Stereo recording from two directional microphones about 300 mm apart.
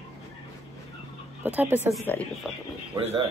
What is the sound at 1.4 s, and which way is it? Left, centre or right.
A woman's voice, centre.